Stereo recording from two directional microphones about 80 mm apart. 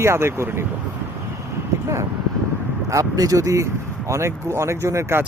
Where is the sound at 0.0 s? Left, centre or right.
Right.